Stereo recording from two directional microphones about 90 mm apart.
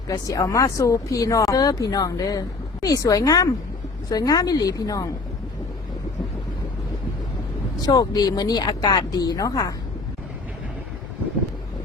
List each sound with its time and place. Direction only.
0.1 s speech: 40° left (ahead or behind)
7.8 s speech: 45° left (ahead or behind)